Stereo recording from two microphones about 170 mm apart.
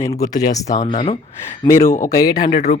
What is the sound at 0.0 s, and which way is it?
Speech, 20° left (ahead or behind).